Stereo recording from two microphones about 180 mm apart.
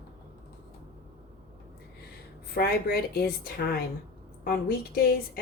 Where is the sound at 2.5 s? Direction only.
55° left (ahead or behind).